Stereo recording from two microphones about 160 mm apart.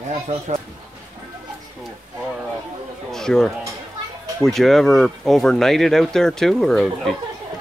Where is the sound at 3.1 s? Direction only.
5° left (ahead or behind).